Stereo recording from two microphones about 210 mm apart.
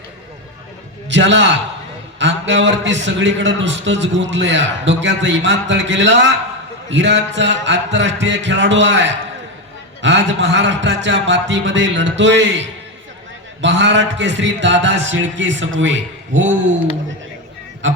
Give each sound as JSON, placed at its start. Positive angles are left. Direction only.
{"t": 1.0, "sound": "a man's voice", "side_deg": -60}
{"t": 17.8, "sound": "a man's voice", "side_deg": -60}